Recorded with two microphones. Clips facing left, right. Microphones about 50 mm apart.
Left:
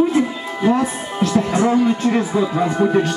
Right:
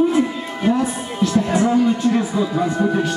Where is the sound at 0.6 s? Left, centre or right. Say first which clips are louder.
Left 2 dB; left.